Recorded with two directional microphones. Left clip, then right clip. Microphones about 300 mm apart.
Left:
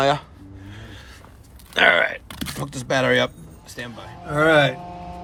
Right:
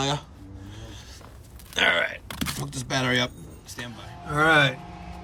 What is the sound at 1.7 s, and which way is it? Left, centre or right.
Speech, centre.